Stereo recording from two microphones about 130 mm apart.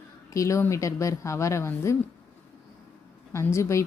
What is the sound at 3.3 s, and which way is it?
Speech, 20° left (ahead or behind).